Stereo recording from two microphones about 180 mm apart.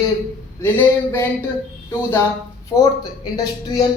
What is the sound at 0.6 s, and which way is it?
A woman's voice, 10° left (ahead or behind).